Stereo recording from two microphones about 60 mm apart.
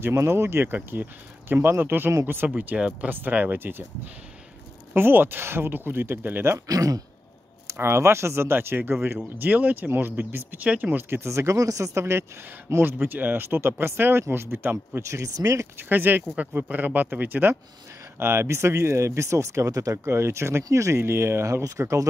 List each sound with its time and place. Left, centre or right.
0.0 s speech: right
0.7 s speech: right
2.5 s speech: right
4.9 s speech: right
6.7 s a man's voice: right
7.7 s speech: right
13.0 s speech: right
15.0 s speech: right
15.9 s speech: right
18.2 s speech: right
20.1 s speech: right
21.6 s speech: right